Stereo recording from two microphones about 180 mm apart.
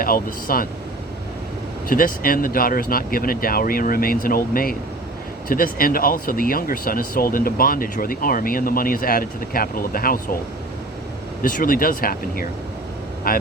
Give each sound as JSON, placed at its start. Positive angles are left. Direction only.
{"t": 0.0, "sound": "speech", "side_deg": 50}
{"t": 1.9, "sound": "speech", "side_deg": 50}
{"t": 11.4, "sound": "speech", "side_deg": 50}